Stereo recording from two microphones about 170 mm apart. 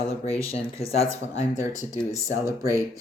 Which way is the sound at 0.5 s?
35° left (ahead or behind).